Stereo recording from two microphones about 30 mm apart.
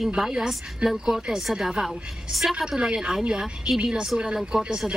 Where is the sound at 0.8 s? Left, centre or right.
Right.